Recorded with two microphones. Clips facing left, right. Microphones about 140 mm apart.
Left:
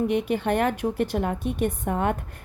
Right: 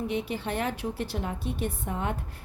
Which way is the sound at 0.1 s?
55° left (ahead or behind).